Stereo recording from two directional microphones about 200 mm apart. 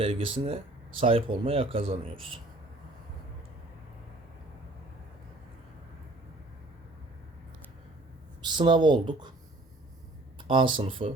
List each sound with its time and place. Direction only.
0.0 s speech: 25° right (ahead or behind)
8.4 s speech: 25° right (ahead or behind)
10.5 s speech: 25° right (ahead or behind)